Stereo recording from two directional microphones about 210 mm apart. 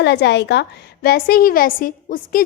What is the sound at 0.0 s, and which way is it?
A woman's voice, 55° left (ahead or behind).